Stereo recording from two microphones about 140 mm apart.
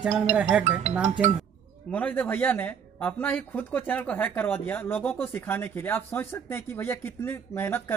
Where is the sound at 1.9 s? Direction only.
10° left (ahead or behind).